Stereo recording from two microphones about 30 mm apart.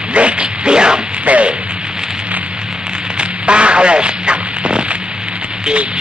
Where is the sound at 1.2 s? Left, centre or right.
Right.